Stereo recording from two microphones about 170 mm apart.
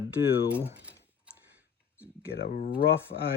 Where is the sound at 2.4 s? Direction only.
60° left (ahead or behind).